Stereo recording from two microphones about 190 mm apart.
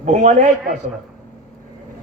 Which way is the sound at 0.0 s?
40° right (ahead or behind).